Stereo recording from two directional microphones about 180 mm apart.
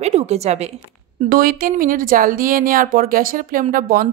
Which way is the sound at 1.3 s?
50° right (ahead or behind).